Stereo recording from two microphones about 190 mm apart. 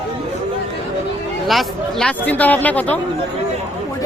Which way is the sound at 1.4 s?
Centre (ahead or behind).